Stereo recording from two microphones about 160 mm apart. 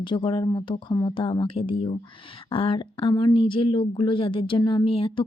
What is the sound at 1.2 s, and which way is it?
Speech, 30° left (ahead or behind).